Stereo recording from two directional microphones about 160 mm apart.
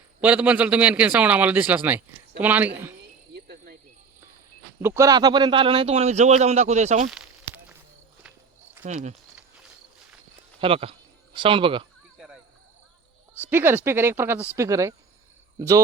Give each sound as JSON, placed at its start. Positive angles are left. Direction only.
{"t": 0.2, "sound": "a man's voice", "side_deg": -10}
{"t": 3.3, "sound": "cricket", "side_deg": -90}
{"t": 4.8, "sound": "speech", "side_deg": -15}
{"t": 7.1, "sound": "a sound", "side_deg": -10}
{"t": 10.6, "sound": "speech", "side_deg": -35}
{"t": 12.1, "sound": "cricket", "side_deg": -5}
{"t": 13.5, "sound": "a man's voice", "side_deg": -15}